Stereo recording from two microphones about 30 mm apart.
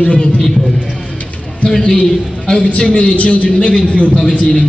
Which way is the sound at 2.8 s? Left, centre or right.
Left.